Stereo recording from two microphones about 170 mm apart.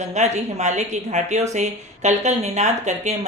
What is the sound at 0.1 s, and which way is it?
Speech, 45° right (ahead or behind).